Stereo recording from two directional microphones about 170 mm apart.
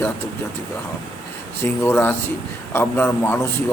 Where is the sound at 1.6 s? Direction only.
15° left (ahead or behind).